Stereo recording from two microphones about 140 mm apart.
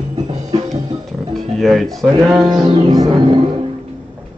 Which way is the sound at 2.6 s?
35° right (ahead or behind).